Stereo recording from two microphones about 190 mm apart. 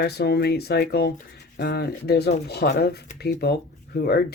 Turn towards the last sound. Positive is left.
turn(degrees=55)  # may be behind; listen again after turning